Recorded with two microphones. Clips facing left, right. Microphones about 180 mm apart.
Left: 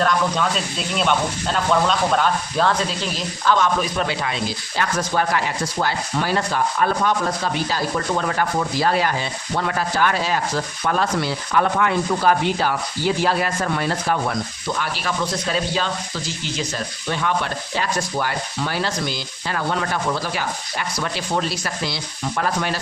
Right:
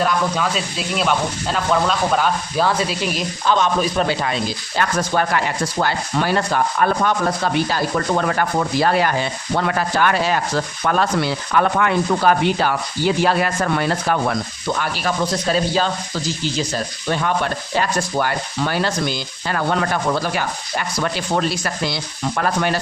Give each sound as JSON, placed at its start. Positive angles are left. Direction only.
{"t": 0.0, "sound": "speech", "side_deg": -5}
{"t": 3.8, "sound": "speech", "side_deg": -40}
{"t": 4.8, "sound": "speech", "side_deg": -55}
{"t": 14.8, "sound": "speech", "side_deg": -40}
{"t": 22.4, "sound": "speech", "side_deg": -55}